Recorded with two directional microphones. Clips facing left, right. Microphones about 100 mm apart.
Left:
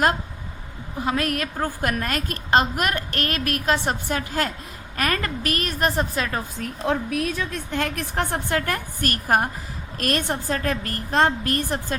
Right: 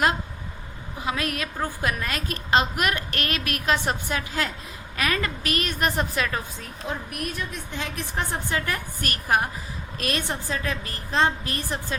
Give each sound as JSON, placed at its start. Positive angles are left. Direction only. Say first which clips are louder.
{"t": 1.0, "sound": "a woman's voice", "louder": "left 4 dB", "side_deg": 45}
{"t": 6.8, "sound": "a woman's voice", "louder": "left 8 dB", "side_deg": 90}